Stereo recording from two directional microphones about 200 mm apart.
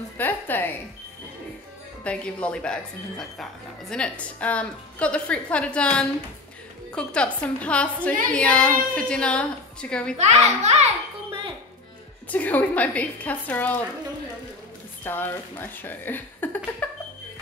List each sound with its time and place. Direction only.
0.2 s a woman's voice: 10° left (ahead or behind)
2.0 s a woman's voice: 5° left (ahead or behind)
10.1 s a child's voice: 35° right (ahead or behind)
12.3 s speech: 10° left (ahead or behind)
15.0 s speech: 10° left (ahead or behind)